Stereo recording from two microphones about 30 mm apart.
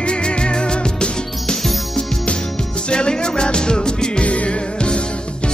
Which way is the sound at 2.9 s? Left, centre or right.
Left.